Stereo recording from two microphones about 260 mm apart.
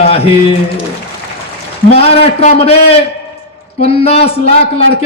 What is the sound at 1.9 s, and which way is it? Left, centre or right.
A man's voice, left.